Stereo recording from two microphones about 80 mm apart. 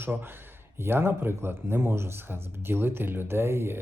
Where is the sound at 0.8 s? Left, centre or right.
Right.